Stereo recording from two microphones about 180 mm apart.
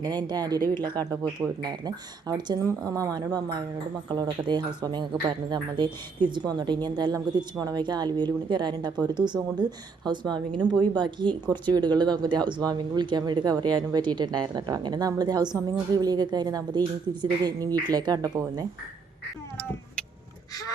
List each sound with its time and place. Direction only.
0.0 s a woman's voice: 25° right (ahead or behind)